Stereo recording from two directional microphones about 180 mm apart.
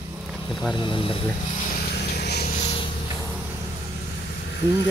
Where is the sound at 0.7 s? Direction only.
25° left (ahead or behind).